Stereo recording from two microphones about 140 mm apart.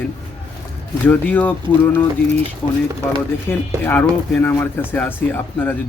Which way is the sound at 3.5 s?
15° left (ahead or behind).